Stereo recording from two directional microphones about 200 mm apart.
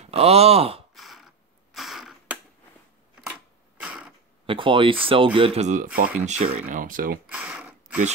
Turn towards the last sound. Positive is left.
turn(degrees=-5)  # may be behind; listen again after turning